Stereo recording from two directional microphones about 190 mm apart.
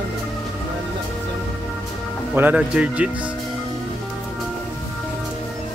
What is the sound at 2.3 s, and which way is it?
Speech, 10° right (ahead or behind).